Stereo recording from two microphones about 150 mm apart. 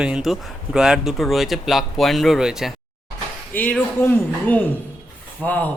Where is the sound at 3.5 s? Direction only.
10° left (ahead or behind).